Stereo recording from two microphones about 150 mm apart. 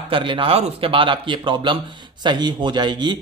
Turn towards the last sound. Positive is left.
turn(degrees=-30)  # may be behind; listen again after turning